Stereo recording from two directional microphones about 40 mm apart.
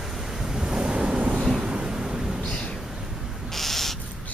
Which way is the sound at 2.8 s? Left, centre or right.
Centre.